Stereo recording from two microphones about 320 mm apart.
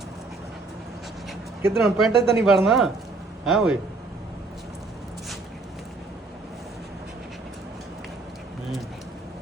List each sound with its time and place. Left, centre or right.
1.7 s speech: centre